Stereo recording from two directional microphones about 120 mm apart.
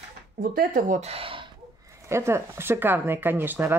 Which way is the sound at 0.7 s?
90° right.